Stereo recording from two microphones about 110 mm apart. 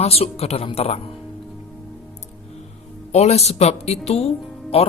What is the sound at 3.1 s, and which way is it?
Speech, 85° left.